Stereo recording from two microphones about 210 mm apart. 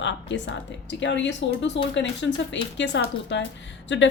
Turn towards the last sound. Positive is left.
turn(degrees=60)  # may be behind; listen again after turning